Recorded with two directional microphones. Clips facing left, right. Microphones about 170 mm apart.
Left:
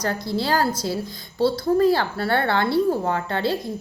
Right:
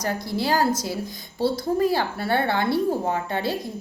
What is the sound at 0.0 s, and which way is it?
Speech, 15° right (ahead or behind).